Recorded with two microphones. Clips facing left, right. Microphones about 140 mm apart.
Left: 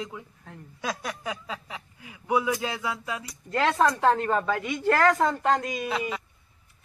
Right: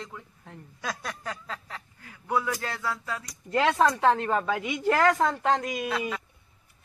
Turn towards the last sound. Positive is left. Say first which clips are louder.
# even
turn(degrees=0)  # may be behind; listen again after turning